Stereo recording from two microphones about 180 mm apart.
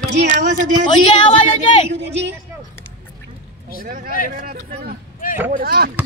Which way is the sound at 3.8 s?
50° right (ahead or behind).